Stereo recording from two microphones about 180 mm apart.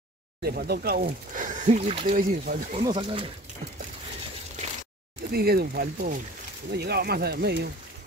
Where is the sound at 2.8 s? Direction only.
25° right (ahead or behind).